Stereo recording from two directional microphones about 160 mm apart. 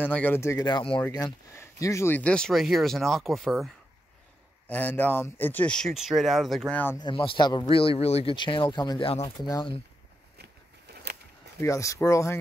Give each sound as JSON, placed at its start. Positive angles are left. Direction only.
{"t": 0.0, "sound": "speech", "side_deg": 10}
{"t": 0.7, "sound": "speech", "side_deg": 30}
{"t": 7.0, "sound": "speech", "side_deg": 30}
{"t": 10.3, "sound": "a sound", "side_deg": -90}
{"t": 11.6, "sound": "speech", "side_deg": 20}